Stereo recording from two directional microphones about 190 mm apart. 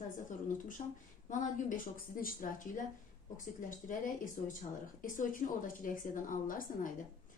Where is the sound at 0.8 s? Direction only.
30° left (ahead or behind).